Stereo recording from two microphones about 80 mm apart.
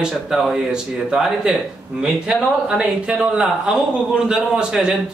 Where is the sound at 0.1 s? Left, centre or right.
Centre.